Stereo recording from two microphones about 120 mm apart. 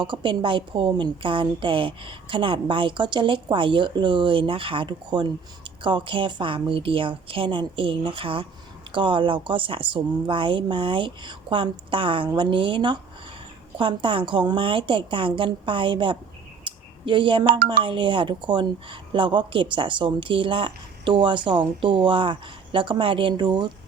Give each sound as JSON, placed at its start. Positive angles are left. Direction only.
{"t": 0.0, "sound": "a woman's voice", "side_deg": -40}